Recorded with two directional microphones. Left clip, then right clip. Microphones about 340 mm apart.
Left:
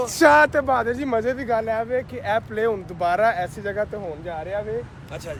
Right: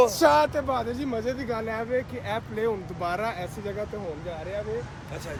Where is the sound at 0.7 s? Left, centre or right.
Centre.